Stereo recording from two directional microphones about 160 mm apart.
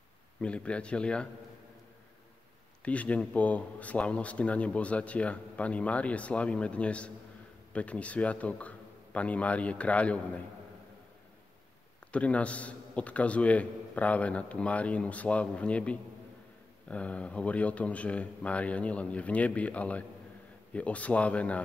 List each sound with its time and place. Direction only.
0.4 s speech: 5° left (ahead or behind)
2.8 s speech: 10° left (ahead or behind)
12.1 s speech: 10° left (ahead or behind)